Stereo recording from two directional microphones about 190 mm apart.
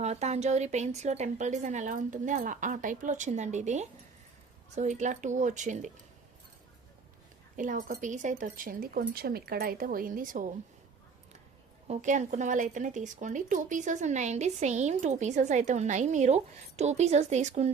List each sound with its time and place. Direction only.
0.0 s speech: 35° right (ahead or behind)
7.5 s speech: 45° right (ahead or behind)
11.9 s speech: 40° right (ahead or behind)